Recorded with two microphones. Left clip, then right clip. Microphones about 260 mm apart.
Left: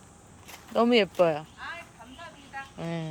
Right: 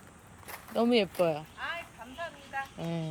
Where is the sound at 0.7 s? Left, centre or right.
Centre.